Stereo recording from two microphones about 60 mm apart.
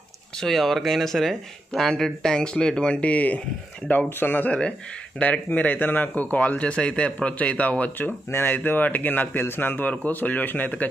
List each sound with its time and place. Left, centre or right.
0.4 s speech: centre; by 8.1 s left
8.3 s a man's voice: left